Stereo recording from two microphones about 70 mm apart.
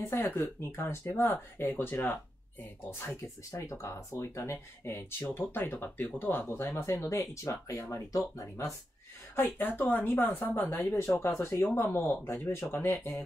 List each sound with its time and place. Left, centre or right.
0.1 s speech: left
3.2 s speech: left
6.9 s speech: left
9.3 s a woman's voice: left